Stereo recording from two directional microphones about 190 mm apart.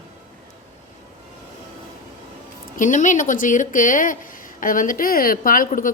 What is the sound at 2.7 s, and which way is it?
A woman's voice, 40° left (ahead or behind).